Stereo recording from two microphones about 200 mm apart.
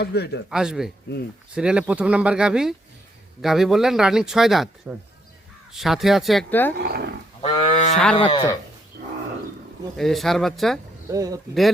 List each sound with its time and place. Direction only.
0.0 s a man's voice: 55° left (ahead or behind)
0.5 s speech: 5° right (ahead or behind)
6.7 s speech: 55° right (ahead or behind)
7.4 s moo: 30° left (ahead or behind)
8.1 s speech: 25° left (ahead or behind)
8.9 s wild animals: 55° right (ahead or behind)
10.0 s speech: centre (ahead or behind)
11.1 s speech: 15° right (ahead or behind)